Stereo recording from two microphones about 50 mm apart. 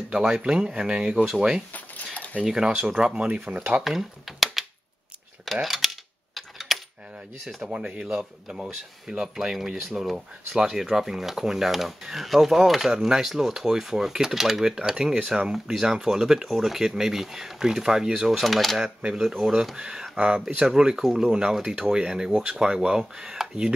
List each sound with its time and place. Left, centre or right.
0.1 s speech: centre
3.3 s speech: right
3.8 s speech: centre
5.4 s coin: centre
6.3 s a sound: centre
7.4 s speech: right
8.2 s speech: centre
9.1 s speech: centre
9.4 s speech: centre